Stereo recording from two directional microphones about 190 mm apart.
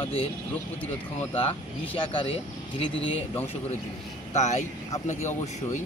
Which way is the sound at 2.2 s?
30° left (ahead or behind).